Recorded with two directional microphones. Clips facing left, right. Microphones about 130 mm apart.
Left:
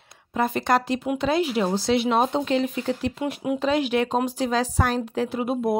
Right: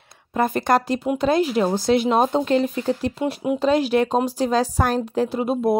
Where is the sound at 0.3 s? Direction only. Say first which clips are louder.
Right 3 dB; 50° right (ahead or behind).